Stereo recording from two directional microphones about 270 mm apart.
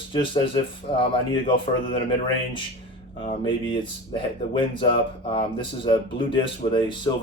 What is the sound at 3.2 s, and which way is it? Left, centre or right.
Speech, centre.